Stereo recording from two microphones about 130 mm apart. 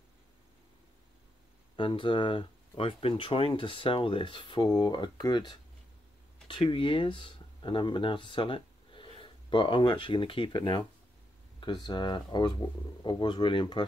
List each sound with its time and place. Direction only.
1.8 s speech: 40° left (ahead or behind)